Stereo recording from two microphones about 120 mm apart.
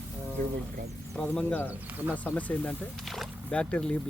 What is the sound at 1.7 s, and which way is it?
Speech, 15° right (ahead or behind).